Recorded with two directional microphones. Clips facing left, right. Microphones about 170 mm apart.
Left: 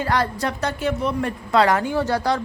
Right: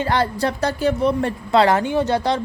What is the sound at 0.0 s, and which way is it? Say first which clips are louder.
A woman's voice: right 2 dB; 25° right (ahead or behind).